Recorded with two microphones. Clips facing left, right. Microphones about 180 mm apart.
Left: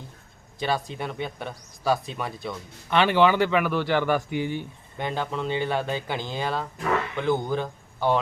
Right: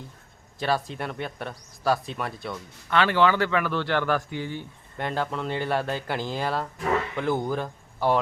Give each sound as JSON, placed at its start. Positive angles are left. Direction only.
{"t": 0.6, "sound": "speech", "side_deg": 0}
{"t": 2.9, "sound": "speech", "side_deg": 20}
{"t": 4.9, "sound": "speech", "side_deg": 0}